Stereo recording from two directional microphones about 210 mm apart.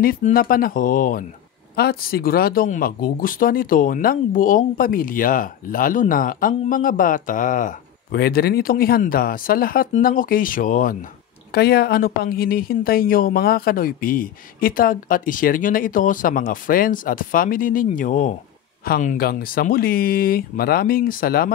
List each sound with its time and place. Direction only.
0.0 s speech: 45° left (ahead or behind)